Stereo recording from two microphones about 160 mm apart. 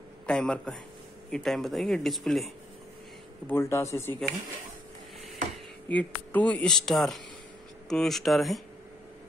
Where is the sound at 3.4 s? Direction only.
15° left (ahead or behind).